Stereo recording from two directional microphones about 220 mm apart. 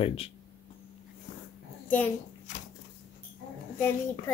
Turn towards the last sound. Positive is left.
turn(degrees=10)  # may be behind; listen again after turning